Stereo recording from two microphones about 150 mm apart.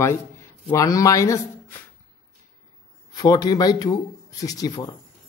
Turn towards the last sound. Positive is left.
turn(degrees=25)  # may be behind; listen again after turning